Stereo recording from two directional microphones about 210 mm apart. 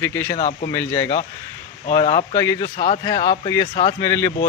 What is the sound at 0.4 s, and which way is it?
Speech, 35° left (ahead or behind).